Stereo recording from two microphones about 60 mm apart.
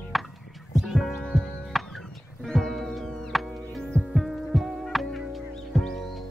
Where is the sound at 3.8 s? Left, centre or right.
Centre.